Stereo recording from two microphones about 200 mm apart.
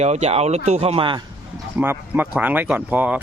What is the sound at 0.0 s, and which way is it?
Speech, 35° right (ahead or behind).